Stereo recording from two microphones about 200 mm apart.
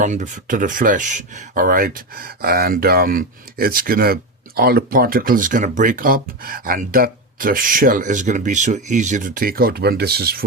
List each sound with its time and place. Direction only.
0.0 s speech: 40° right (ahead or behind)